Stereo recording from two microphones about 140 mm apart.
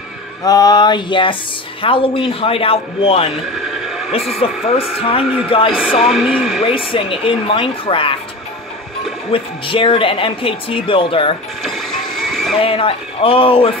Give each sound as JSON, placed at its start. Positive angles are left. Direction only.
{"t": 0.4, "sound": "speech", "side_deg": 25}
{"t": 4.4, "sound": "speech", "side_deg": 45}
{"t": 5.8, "sound": "speech", "side_deg": -5}
{"t": 6.9, "sound": "speech", "side_deg": 40}
{"t": 9.3, "sound": "speech", "side_deg": 40}
{"t": 11.6, "sound": "music", "side_deg": 0}
{"t": 12.5, "sound": "speech", "side_deg": 40}